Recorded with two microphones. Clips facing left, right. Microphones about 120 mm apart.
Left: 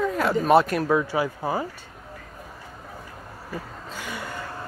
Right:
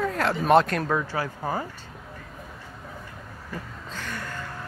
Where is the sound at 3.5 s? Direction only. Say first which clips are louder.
Left 2 dB; 10° left (ahead or behind).